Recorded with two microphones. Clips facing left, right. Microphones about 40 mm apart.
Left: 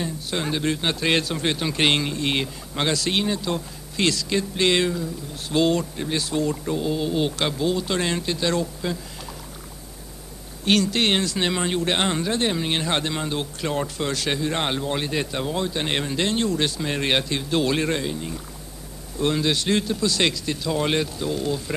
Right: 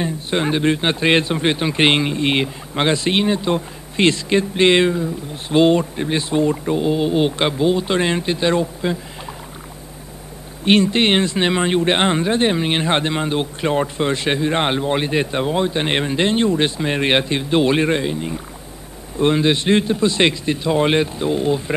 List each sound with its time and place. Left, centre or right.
0.0 s speech: right
10.6 s speech: right